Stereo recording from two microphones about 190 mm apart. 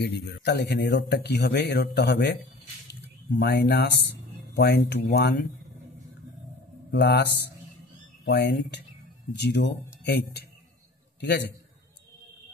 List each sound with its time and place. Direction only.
0.0 s speech: 60° left (ahead or behind)
3.3 s speech: 60° left (ahead or behind)
6.9 s a man's voice: 60° left (ahead or behind)
8.3 s a man's voice: 65° left (ahead or behind)